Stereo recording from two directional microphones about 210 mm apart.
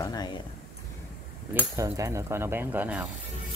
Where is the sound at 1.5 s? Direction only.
10° right (ahead or behind).